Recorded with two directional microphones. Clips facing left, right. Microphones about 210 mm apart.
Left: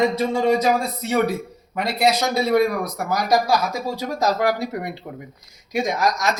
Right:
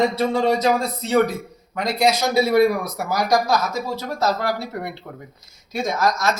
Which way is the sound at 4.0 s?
15° left (ahead or behind).